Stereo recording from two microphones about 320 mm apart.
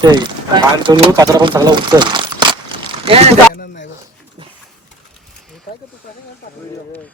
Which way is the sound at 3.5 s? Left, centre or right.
Left.